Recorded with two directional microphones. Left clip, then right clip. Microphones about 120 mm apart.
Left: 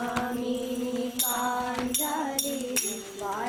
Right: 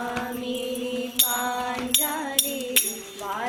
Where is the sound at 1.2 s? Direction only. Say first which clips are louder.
Right 4 dB; 30° right (ahead or behind).